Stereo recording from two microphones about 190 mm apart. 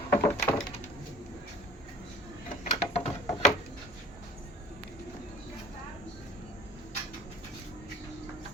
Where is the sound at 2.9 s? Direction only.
30° left (ahead or behind).